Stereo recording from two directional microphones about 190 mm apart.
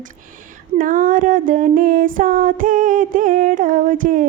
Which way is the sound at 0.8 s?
45° right (ahead or behind).